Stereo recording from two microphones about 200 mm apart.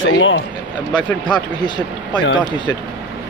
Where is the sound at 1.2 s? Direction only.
20° left (ahead or behind).